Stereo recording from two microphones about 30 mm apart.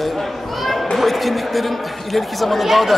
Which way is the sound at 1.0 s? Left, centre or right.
Centre.